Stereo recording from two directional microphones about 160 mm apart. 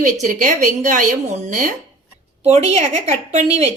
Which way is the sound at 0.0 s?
50° right (ahead or behind).